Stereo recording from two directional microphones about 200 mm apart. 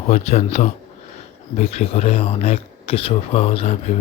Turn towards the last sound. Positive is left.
turn(degrees=30)  # may be behind; listen again after turning